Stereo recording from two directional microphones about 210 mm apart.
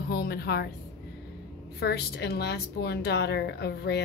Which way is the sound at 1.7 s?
50° left (ahead or behind).